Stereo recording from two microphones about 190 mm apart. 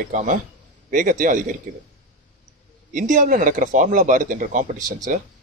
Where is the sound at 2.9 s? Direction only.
45° right (ahead or behind).